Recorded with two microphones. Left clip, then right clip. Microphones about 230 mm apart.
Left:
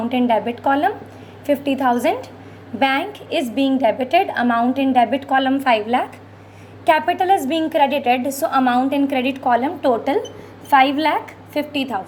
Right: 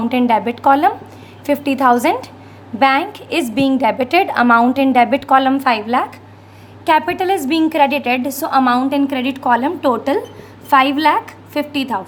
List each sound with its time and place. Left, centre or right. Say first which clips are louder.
0.1 s a woman's voice: right 3 dB; centre